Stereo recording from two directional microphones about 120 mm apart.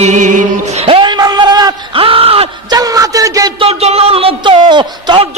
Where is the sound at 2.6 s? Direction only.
30° right (ahead or behind).